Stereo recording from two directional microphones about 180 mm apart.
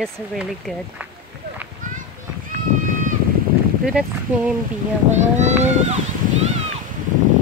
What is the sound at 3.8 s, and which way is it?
Speech, 5° right (ahead or behind).